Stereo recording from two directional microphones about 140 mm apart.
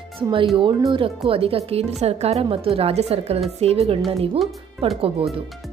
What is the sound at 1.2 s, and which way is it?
A woman's voice, 40° right (ahead or behind).